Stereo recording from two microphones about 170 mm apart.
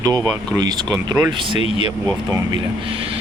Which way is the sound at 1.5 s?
35° left (ahead or behind).